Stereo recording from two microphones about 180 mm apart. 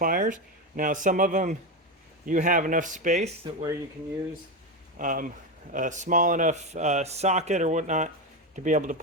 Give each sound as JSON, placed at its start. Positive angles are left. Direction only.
{"t": 0.0, "sound": "speech", "side_deg": -50}
{"t": 3.4, "sound": "speech", "side_deg": -25}
{"t": 4.9, "sound": "speech", "side_deg": -45}